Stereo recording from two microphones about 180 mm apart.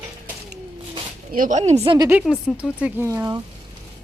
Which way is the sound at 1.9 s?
15° right (ahead or behind).